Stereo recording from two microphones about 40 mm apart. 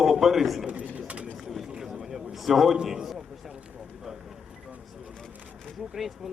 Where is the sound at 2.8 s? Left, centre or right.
Centre.